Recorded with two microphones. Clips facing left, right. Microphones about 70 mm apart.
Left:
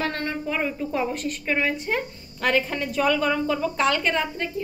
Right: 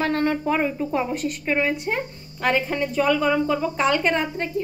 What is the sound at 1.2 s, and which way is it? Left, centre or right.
A woman's voice, centre.